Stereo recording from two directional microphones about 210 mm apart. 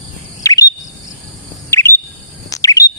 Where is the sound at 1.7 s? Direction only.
10° left (ahead or behind).